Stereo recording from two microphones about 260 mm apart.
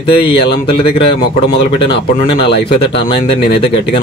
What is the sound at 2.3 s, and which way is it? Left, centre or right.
Speech, centre.